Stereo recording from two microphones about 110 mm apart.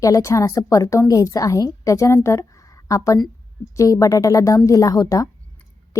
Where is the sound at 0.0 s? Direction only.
30° left (ahead or behind).